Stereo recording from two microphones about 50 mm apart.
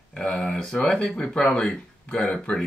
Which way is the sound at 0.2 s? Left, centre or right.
Centre.